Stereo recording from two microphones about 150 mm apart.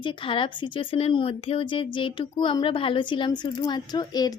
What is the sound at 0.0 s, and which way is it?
Speech, 35° left (ahead or behind).